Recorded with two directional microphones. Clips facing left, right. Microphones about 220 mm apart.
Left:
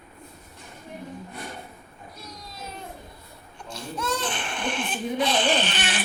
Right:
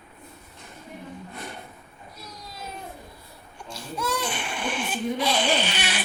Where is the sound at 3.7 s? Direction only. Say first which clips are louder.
Even; 10° right (ahead or behind).